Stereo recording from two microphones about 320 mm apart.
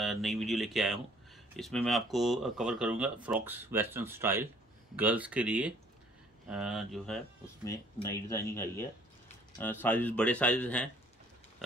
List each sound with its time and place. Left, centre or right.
0.0 s speech: centre